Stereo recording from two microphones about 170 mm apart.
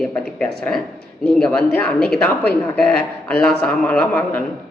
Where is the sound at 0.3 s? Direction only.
5° left (ahead or behind).